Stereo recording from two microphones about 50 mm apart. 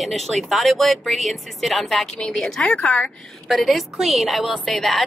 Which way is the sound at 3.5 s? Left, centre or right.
Centre.